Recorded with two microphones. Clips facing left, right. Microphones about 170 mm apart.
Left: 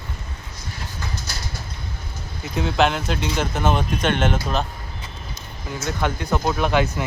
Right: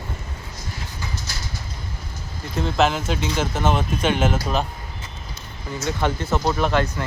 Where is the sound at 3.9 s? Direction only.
5° right (ahead or behind).